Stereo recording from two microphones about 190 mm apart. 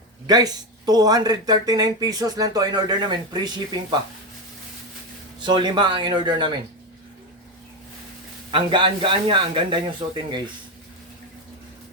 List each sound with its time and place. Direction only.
0.3 s speech: 20° right (ahead or behind)
5.4 s speech: 25° right (ahead or behind)
8.4 s speech: 25° right (ahead or behind)